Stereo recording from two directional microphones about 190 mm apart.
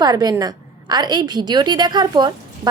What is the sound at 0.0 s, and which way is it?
A woman's voice, 20° right (ahead or behind).